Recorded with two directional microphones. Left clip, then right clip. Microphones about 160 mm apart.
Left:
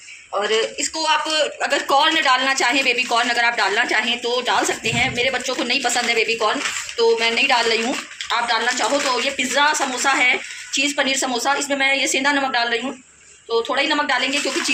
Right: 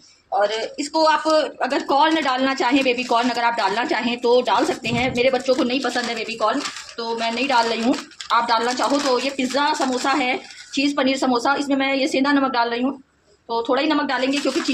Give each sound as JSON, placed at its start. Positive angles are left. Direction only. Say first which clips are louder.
{"t": 0.5, "sound": "speech", "louder": "left 2 dB", "side_deg": -75}